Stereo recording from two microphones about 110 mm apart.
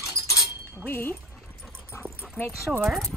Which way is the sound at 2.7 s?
5° right (ahead or behind).